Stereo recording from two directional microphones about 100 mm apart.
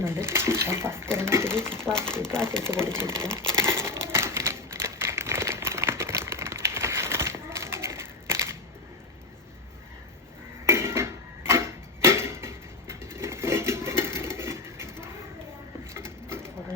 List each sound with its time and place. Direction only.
0.0 s speech: 25° right (ahead or behind)
3.5 s crumpling: 25° right (ahead or behind)
10.7 s tick-tock: 25° right (ahead or behind)
12.9 s a sound: 25° right (ahead or behind)